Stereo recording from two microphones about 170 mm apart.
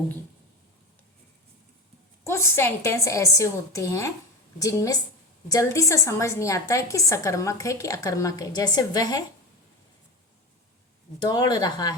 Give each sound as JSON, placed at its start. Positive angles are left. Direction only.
{"t": 2.2, "sound": "a woman's voice", "side_deg": 15}
{"t": 11.2, "sound": "a woman's voice", "side_deg": 25}